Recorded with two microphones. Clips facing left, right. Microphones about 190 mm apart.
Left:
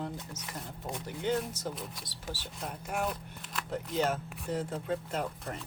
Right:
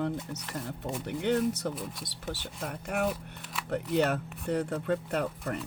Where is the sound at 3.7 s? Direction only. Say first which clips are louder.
Right 4 dB; 65° right (ahead or behind).